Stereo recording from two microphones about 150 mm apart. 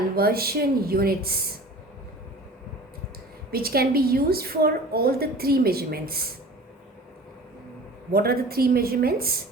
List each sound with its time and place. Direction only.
0.2 s a woman's voice: 90° right
3.5 s a woman's voice: 90° right
8.1 s a woman's voice: 90° right